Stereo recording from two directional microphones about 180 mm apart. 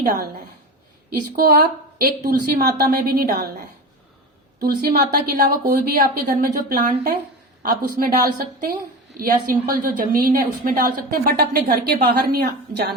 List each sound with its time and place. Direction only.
1.4 s a woman's voice: 50° right (ahead or behind)
4.6 s a woman's voice: 55° right (ahead or behind)